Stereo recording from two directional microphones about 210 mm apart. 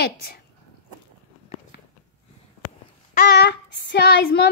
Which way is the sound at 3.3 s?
55° left (ahead or behind).